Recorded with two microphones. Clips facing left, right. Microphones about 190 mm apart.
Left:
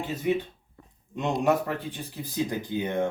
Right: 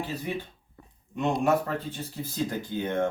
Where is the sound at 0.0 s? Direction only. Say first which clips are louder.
Left 5 dB; 20° left (ahead or behind).